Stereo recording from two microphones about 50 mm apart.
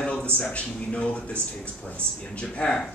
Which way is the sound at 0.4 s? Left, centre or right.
Left.